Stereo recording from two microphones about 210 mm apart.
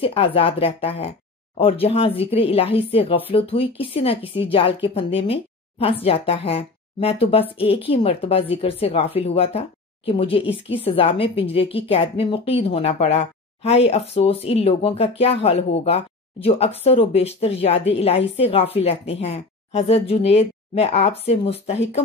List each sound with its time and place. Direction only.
0.0 s speech: 25° left (ahead or behind)